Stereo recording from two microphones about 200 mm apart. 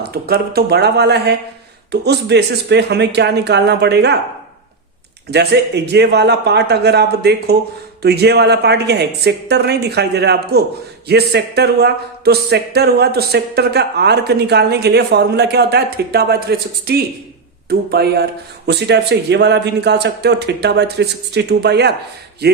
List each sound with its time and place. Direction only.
0.0 s speech: 50° right (ahead or behind)
5.3 s speech: 55° right (ahead or behind)